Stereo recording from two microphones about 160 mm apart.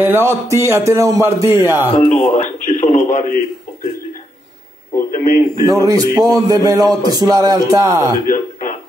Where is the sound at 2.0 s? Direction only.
45° left (ahead or behind).